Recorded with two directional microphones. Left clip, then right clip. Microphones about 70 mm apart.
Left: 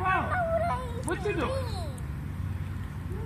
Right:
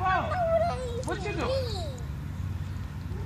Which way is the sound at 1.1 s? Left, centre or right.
Right.